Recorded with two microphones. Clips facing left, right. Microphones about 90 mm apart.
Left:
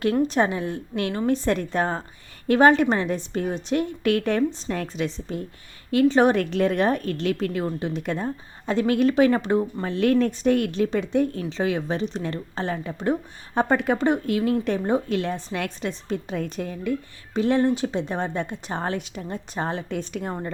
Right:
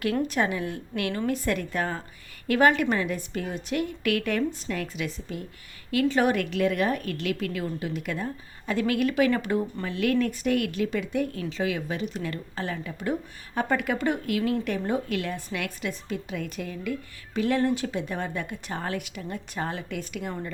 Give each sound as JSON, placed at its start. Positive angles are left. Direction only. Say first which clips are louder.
{"t": 0.0, "sound": "a woman's voice", "louder": "left 5 dB", "side_deg": 30}
{"t": 9.8, "sound": "a woman's voice", "louder": "left 4 dB", "side_deg": 35}